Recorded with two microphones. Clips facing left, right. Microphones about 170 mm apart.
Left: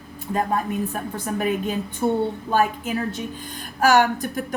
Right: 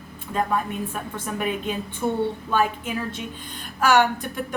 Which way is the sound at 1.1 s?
40° left (ahead or behind).